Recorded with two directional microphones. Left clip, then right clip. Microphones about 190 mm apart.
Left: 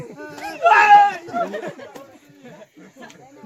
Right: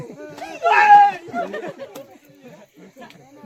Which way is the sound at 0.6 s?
10° left (ahead or behind).